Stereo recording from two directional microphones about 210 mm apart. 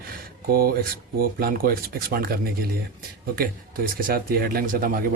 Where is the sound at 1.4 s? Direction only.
45° right (ahead or behind).